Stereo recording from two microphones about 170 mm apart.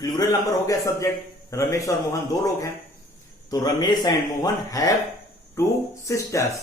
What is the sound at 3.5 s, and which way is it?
A man's voice, 25° left (ahead or behind).